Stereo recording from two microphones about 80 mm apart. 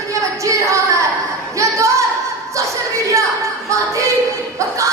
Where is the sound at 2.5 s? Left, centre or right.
Right.